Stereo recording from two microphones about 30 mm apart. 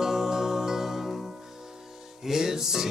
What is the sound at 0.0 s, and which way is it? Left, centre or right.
Music, centre.